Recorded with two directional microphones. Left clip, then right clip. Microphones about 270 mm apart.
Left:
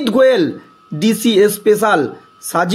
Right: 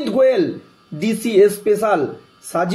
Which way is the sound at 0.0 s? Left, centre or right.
Left.